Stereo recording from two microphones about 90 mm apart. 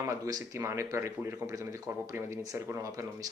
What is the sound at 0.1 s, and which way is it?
Speech, 35° right (ahead or behind).